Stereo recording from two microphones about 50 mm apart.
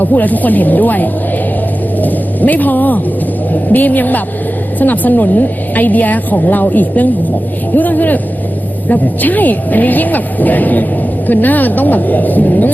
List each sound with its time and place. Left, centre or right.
0.0 s a woman's voice: left